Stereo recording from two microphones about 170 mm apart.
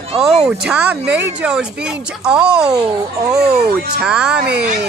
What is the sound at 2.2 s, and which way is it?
Speech, 5° right (ahead or behind).